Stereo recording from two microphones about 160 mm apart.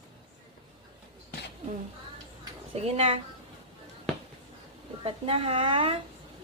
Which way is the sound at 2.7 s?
40° right (ahead or behind).